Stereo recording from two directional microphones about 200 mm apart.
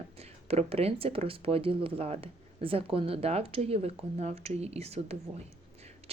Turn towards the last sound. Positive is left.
turn(degrees=-30)  # may be behind; listen again after turning